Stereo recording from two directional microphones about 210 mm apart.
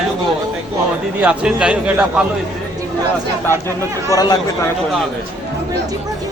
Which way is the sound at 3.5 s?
15° left (ahead or behind).